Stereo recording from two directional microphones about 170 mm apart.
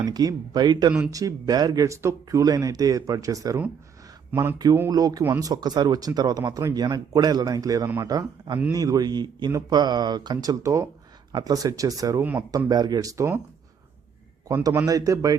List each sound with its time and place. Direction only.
0.0 s speech: 25° right (ahead or behind)
12.2 s speech: 10° right (ahead or behind)
12.5 s speech: 20° right (ahead or behind)
14.4 s speech: 15° right (ahead or behind)